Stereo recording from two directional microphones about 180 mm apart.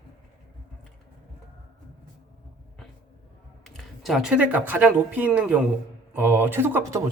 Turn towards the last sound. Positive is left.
turn(degrees=-15)  # may be behind; listen again after turning